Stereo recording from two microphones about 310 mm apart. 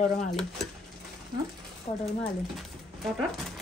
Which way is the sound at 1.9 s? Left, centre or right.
Left.